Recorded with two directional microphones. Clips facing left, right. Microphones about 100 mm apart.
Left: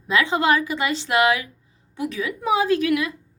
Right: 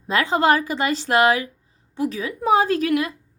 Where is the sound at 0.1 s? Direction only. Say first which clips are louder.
Right 1 dB; 40° right (ahead or behind).